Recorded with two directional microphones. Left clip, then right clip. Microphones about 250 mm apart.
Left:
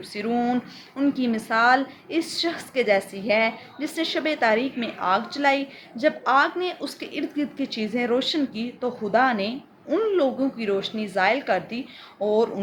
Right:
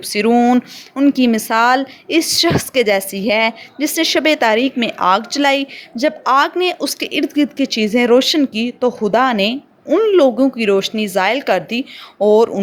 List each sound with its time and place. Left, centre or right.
0.0 s speech: right